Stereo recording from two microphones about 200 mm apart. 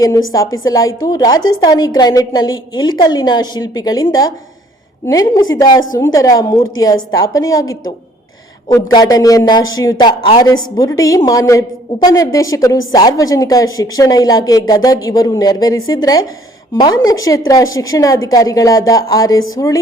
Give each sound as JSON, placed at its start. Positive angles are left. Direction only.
{"t": 0.6, "sound": "a woman's voice", "side_deg": 15}